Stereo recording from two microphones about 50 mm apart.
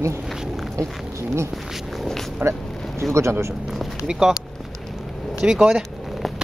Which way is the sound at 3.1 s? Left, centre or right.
Right.